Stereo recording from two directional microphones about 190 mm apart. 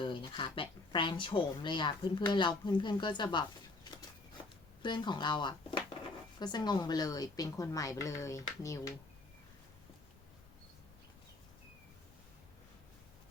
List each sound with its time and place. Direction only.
0.0 s speech: 25° left (ahead or behind)
4.8 s speech: 25° left (ahead or behind)